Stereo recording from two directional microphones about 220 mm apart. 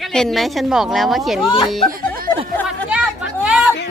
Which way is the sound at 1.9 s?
40° right (ahead or behind).